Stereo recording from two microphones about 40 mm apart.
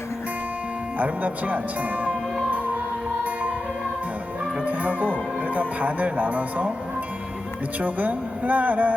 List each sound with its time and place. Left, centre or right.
0.9 s speech: right
4.6 s music: right
5.5 s speech: right
7.8 s speech: right